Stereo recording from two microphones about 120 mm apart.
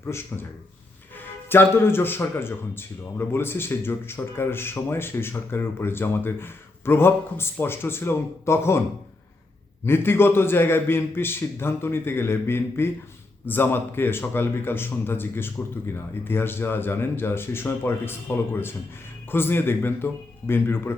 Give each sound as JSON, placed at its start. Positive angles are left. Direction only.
{"t": 0.0, "sound": "a man's voice", "side_deg": 20}
{"t": 1.5, "sound": "speech", "side_deg": 20}
{"t": 9.8, "sound": "a man's voice", "side_deg": 20}